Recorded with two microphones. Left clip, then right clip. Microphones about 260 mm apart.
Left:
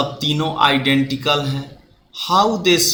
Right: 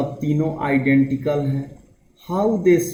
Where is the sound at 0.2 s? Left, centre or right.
Left.